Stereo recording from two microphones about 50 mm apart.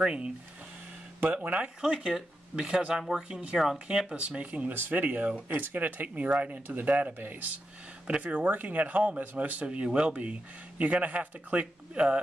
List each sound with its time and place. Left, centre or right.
0.0 s speech: centre
1.3 s speech: right
1.8 s speech: centre
3.3 s speech: right
4.4 s speech: right
6.9 s speech: right
7.2 s speech: right; by 12.2 s centre